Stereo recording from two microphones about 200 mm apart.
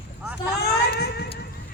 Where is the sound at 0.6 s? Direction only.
55° left (ahead or behind).